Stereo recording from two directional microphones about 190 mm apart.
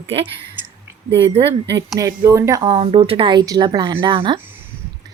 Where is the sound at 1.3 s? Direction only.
30° right (ahead or behind).